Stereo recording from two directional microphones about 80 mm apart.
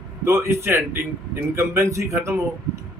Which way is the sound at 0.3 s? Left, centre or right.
Right.